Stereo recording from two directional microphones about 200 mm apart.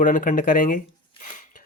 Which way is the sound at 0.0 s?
40° left (ahead or behind).